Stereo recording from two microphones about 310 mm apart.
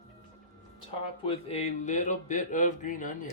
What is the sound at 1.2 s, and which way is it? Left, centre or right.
Speech, left.